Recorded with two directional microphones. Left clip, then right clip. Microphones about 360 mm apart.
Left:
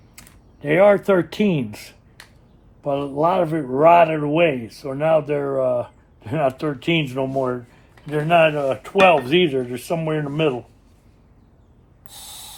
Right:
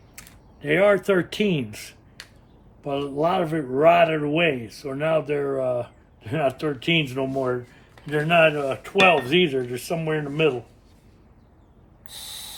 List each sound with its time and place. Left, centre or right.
0.2 s speech: centre
12.0 s owl: centre